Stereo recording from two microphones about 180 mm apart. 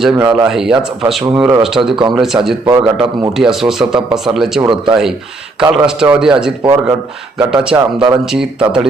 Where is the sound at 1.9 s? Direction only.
25° right (ahead or behind).